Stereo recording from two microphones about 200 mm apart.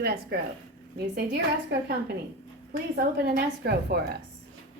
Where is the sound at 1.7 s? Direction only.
55° right (ahead or behind).